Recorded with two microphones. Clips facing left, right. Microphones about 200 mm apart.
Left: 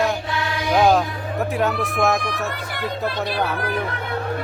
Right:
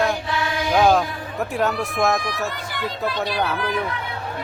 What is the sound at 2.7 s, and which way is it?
Speech, 55° left (ahead or behind).